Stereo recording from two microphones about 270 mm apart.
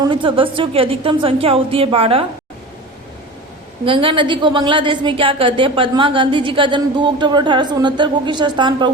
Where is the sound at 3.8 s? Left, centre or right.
Centre.